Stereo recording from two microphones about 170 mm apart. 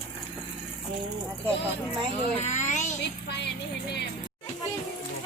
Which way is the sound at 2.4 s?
45° left (ahead or behind).